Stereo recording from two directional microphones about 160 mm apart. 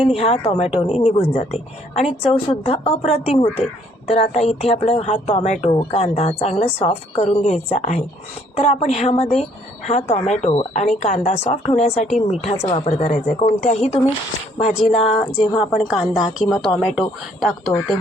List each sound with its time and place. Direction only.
0.1 s speech: 40° left (ahead or behind)
15.0 s speech: 40° left (ahead or behind)
15.5 s a woman's voice: centre (ahead or behind)